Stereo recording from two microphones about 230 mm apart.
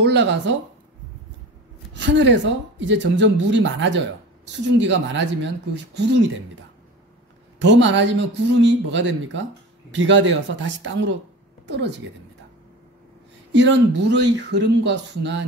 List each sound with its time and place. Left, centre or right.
0.0 s speech: right
2.0 s speech: right
7.5 s speech: right
13.5 s speech: right